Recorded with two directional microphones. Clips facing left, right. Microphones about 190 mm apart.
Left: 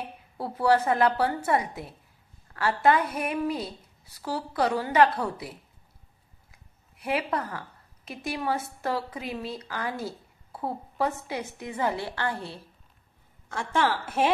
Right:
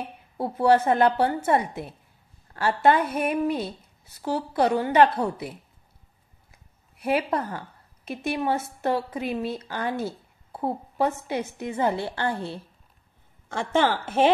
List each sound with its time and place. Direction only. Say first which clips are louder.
0.4 s speech: right 3 dB; 25° right (ahead or behind)
7.0 s speech: right 4 dB; 25° right (ahead or behind)